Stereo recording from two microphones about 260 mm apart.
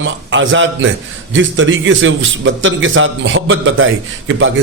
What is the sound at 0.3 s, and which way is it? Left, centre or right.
A man's voice, right.